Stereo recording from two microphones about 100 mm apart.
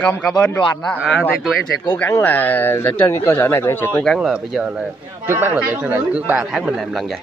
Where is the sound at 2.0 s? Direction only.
25° left (ahead or behind).